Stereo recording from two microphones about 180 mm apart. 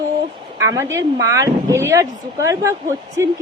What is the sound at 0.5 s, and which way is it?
Speech, 15° right (ahead or behind).